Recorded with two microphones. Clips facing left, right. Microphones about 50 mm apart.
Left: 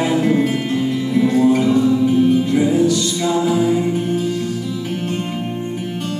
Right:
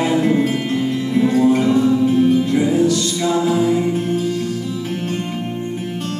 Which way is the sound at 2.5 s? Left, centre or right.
Centre.